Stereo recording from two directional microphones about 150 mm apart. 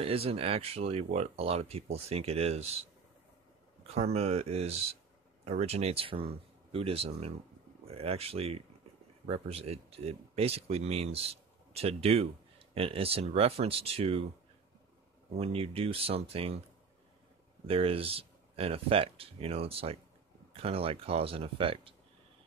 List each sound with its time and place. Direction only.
0.0 s speech: 40° right (ahead or behind)
15.3 s speech: 40° right (ahead or behind)
17.6 s speech: 40° right (ahead or behind)